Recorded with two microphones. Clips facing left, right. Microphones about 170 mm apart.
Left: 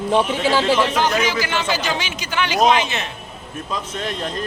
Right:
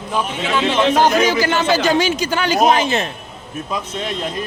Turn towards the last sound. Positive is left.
turn(degrees=-10)  # may be behind; listen again after turning